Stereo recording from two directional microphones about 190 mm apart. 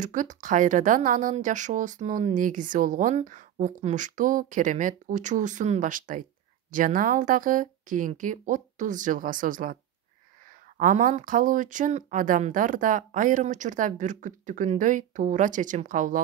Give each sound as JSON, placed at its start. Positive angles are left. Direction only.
{"t": 0.0, "sound": "speech", "side_deg": -40}
{"t": 10.8, "sound": "speech", "side_deg": -45}